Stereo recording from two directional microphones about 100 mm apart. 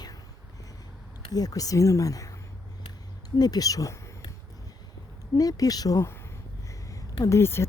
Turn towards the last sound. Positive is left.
turn(degrees=25)  # may be behind; listen again after turning